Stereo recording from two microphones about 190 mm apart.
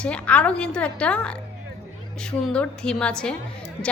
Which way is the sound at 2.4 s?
5° left (ahead or behind).